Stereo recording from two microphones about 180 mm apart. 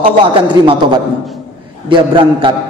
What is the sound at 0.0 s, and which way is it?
A man's voice, 30° right (ahead or behind).